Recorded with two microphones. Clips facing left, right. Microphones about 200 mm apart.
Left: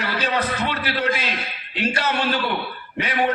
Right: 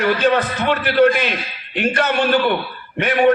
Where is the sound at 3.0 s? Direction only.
65° right (ahead or behind).